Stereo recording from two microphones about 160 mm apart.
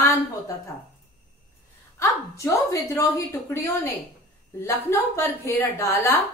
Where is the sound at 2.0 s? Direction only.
20° left (ahead or behind).